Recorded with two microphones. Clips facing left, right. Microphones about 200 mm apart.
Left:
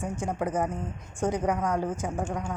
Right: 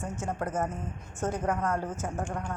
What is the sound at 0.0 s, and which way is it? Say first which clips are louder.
A woman's voice: left 3 dB; 15° left (ahead or behind).